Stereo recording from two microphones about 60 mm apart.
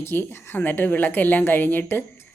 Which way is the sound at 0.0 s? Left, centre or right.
Left.